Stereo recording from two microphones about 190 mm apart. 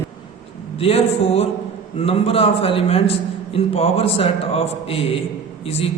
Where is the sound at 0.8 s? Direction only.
30° left (ahead or behind).